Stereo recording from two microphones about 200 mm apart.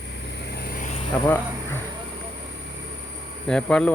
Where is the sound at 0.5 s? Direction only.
50° left (ahead or behind).